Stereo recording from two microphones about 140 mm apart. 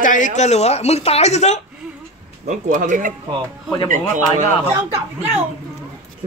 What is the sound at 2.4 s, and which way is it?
Speech, 65° right (ahead or behind).